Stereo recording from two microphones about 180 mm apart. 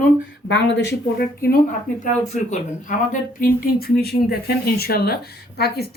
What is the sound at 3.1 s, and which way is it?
Speech, 50° left (ahead or behind).